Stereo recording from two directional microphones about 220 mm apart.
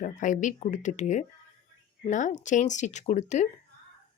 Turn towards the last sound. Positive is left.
turn(degrees=30)  # may be behind; listen again after turning